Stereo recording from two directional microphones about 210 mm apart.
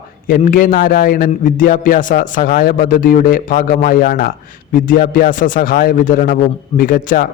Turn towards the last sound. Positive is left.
turn(degrees=40)  # may be behind; listen again after turning